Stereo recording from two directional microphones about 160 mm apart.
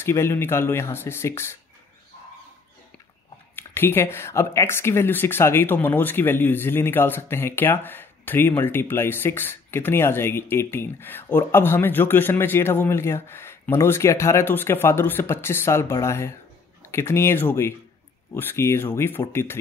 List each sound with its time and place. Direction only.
0.0 s speech: 15° left (ahead or behind)
3.5 s speech: 15° left (ahead or behind)